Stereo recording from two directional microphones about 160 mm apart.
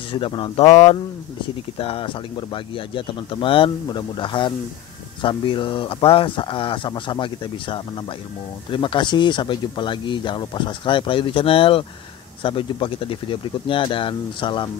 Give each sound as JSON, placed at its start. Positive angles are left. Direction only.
{"t": 0.1, "sound": "speech", "side_deg": 30}
{"t": 1.8, "sound": "speech", "side_deg": 35}